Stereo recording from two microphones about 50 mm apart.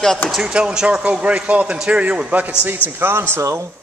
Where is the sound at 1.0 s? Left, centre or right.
Right.